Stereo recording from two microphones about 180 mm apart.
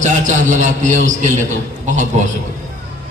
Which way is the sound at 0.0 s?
45° right (ahead or behind).